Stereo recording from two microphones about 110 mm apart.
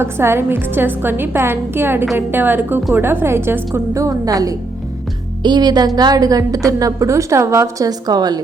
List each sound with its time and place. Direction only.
0.0 s a woman's voice: 25° right (ahead or behind)